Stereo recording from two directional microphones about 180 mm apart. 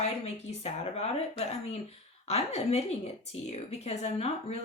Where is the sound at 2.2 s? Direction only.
35° left (ahead or behind).